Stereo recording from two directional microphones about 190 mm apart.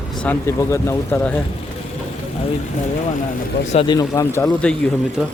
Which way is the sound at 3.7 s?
25° left (ahead or behind).